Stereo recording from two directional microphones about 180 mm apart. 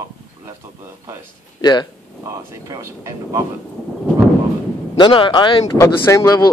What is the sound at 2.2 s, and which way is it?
Speech, 15° right (ahead or behind).